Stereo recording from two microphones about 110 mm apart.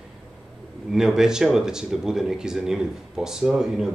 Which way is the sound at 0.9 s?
5° right (ahead or behind).